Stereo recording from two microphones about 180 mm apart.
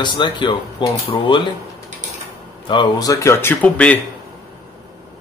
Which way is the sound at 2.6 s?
25° left (ahead or behind).